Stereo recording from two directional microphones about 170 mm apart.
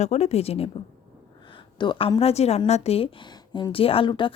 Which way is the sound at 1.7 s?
25° left (ahead or behind).